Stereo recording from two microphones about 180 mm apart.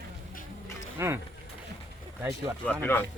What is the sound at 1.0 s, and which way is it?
Speech, 15° right (ahead or behind).